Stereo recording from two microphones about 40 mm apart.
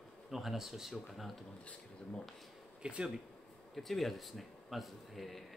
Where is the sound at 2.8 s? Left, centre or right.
Right.